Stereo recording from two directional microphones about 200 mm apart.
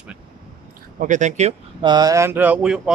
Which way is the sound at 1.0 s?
35° right (ahead or behind).